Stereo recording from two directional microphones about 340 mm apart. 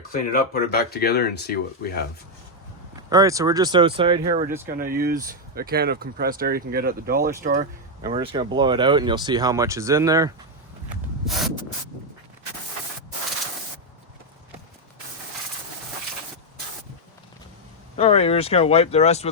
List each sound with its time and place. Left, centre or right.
0.1 s speech: left
3.1 s speech: centre
10.8 s rub: centre
17.9 s speech: centre